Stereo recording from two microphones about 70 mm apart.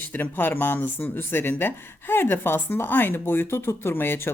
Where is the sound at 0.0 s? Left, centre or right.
Left.